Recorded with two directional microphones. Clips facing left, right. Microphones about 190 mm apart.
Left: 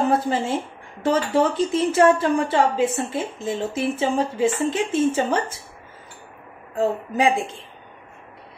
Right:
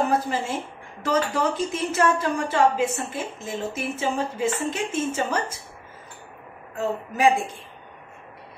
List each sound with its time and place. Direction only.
0.3 s speech: 30° left (ahead or behind)
6.8 s speech: 25° left (ahead or behind)